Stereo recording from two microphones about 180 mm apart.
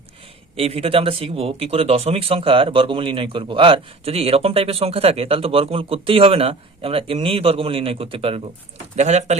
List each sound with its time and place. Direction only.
0.5 s speech: 35° right (ahead or behind)